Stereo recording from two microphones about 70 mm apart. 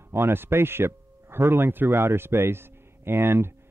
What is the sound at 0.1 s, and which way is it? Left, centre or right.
Speech, right.